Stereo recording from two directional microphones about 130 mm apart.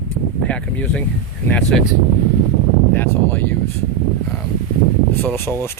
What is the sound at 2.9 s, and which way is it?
Speech, 15° left (ahead or behind).